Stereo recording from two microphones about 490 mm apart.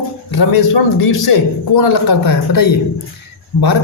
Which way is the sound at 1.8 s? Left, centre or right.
Left.